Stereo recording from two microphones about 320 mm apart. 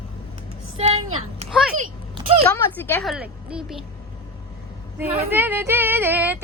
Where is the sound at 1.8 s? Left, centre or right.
Centre.